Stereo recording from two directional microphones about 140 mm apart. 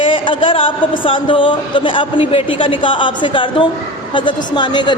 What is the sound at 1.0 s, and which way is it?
A woman's voice, 40° left (ahead or behind).